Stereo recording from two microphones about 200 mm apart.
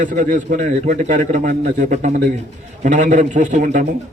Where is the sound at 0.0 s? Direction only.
40° right (ahead or behind).